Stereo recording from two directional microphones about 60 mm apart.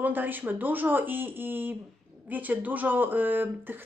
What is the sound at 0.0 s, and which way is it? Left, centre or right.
Speech, right.